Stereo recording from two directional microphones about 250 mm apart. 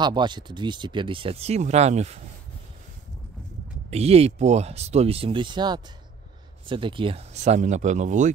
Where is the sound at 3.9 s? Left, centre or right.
Right.